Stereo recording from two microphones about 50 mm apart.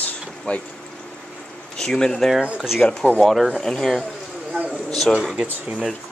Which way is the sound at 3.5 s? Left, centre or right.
Centre.